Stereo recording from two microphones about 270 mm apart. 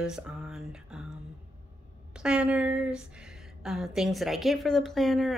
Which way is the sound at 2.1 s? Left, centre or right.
Centre.